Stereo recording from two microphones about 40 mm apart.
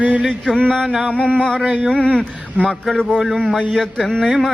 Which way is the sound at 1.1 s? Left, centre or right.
Left.